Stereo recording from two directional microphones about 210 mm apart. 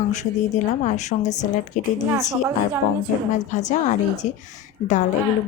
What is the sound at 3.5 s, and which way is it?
A woman's voice, 35° left (ahead or behind).